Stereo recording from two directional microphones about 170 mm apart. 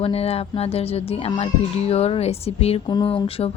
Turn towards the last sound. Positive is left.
turn(degrees=35)  # may be behind; listen again after turning